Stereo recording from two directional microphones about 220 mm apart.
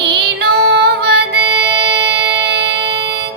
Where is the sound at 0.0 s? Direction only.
50° right (ahead or behind).